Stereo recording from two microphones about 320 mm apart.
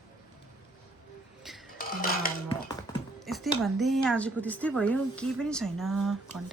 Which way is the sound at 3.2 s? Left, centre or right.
Centre.